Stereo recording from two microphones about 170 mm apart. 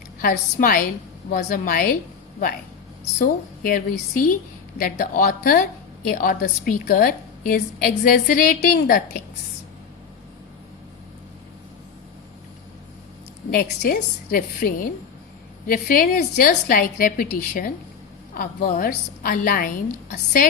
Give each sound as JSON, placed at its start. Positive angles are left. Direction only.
{"t": 0.2, "sound": "a woman's voice", "side_deg": 60}
{"t": 3.2, "sound": "a woman's voice", "side_deg": 55}
{"t": 13.5, "sound": "a woman's voice", "side_deg": 55}